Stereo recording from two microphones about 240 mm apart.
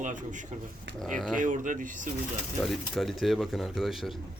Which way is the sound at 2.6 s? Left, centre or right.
Centre.